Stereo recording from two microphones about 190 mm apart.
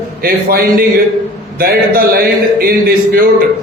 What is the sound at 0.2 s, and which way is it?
A man's voice, 50° right (ahead or behind).